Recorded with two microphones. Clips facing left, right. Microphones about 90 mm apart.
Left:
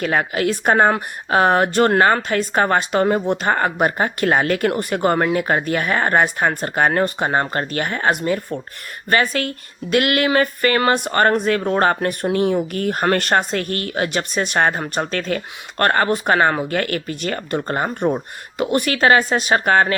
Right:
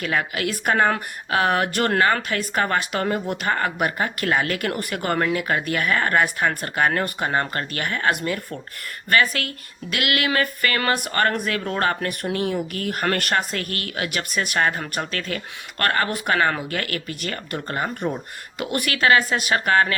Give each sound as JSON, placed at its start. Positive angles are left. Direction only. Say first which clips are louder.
{"t": 0.0, "sound": "a woman's voice", "louder": "left 5 dB", "side_deg": 35}